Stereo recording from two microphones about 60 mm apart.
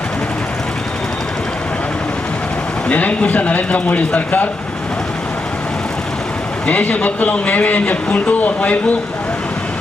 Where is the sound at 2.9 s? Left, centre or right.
Left.